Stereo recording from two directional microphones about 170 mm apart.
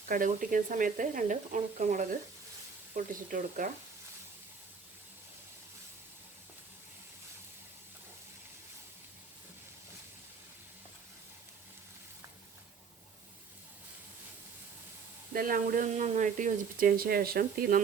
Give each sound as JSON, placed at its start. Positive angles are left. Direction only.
{"t": 0.1, "sound": "speech", "side_deg": -55}
{"t": 15.3, "sound": "speech", "side_deg": -55}